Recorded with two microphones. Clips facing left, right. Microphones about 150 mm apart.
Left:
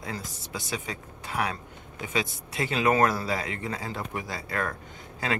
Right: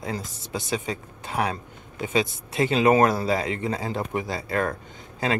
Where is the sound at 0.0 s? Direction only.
25° right (ahead or behind).